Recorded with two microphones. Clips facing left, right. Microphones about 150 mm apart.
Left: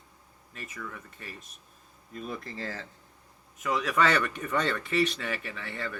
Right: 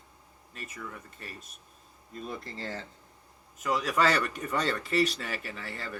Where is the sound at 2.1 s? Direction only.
30° right (ahead or behind).